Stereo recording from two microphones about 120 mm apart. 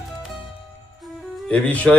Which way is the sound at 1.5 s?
15° left (ahead or behind).